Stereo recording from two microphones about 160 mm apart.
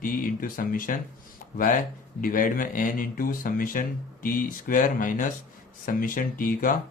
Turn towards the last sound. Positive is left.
turn(degrees=60)  # may be behind; listen again after turning